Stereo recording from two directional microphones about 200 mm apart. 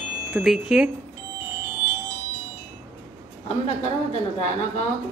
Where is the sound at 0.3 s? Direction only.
5° right (ahead or behind).